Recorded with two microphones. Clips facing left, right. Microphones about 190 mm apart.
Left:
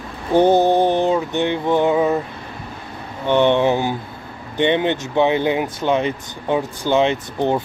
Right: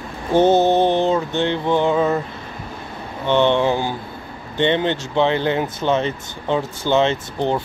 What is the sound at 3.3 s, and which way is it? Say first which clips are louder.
Speech: left 1 dB; 15° left (ahead or behind).